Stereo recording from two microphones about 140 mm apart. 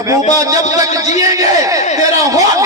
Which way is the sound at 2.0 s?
25° right (ahead or behind).